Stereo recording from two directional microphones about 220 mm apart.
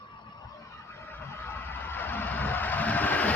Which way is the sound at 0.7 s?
10° left (ahead or behind).